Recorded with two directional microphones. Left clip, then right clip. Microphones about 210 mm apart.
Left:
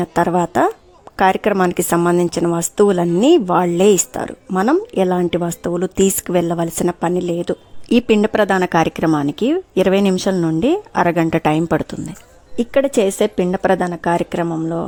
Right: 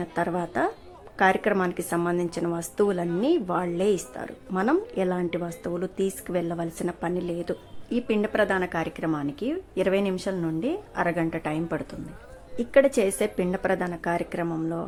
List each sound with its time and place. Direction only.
0.0 s a woman's voice: 40° left (ahead or behind)